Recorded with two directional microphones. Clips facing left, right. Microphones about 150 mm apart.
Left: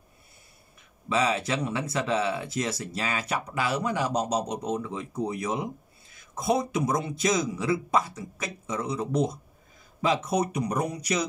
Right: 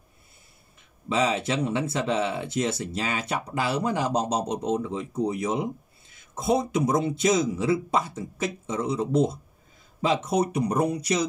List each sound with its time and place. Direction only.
1.0 s speech: 25° right (ahead or behind)